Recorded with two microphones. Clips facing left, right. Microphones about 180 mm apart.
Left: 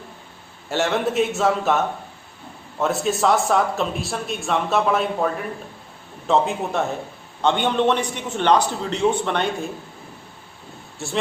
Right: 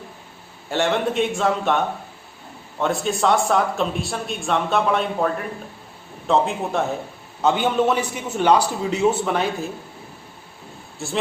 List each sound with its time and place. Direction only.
0.7 s a man's voice: centre (ahead or behind)
11.0 s speech: centre (ahead or behind)